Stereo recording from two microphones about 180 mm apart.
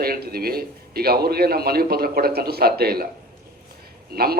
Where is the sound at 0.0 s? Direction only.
55° right (ahead or behind).